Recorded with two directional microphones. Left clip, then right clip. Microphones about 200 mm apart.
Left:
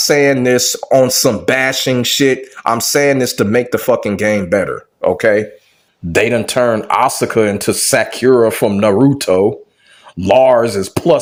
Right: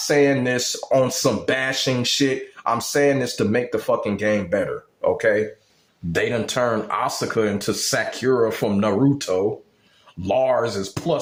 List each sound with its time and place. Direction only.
0.1 s speech: 30° left (ahead or behind)